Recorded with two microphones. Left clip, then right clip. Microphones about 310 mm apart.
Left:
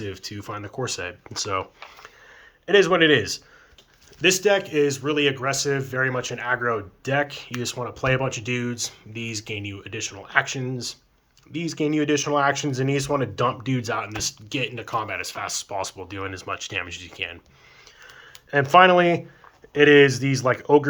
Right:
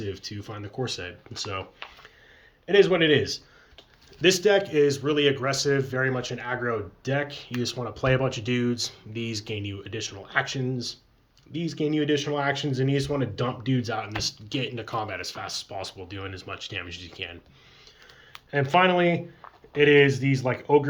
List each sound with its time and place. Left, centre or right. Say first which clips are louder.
0.0 s speech: left 2 dB; centre
18.5 s speech: left 6 dB; centre